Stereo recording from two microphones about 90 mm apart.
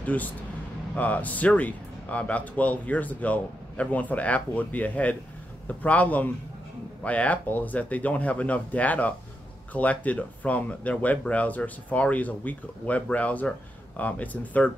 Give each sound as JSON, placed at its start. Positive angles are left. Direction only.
{"t": 0.0, "sound": "speech", "side_deg": 15}